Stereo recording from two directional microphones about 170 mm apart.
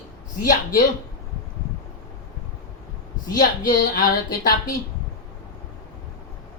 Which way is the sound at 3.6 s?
55° left (ahead or behind).